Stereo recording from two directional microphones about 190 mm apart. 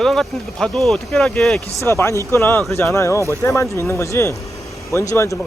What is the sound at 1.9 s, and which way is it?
Speech, 15° left (ahead or behind).